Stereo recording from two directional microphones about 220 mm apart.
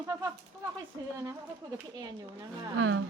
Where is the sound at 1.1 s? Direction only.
15° right (ahead or behind).